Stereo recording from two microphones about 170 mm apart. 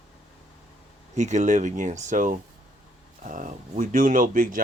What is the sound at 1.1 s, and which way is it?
Speech, 45° right (ahead or behind).